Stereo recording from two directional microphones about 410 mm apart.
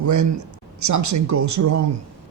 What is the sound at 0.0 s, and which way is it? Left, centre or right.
A man's voice, right.